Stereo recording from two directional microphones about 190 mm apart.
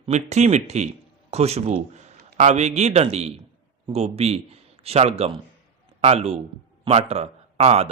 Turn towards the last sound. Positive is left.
turn(degrees=-35)  # may be behind; listen again after turning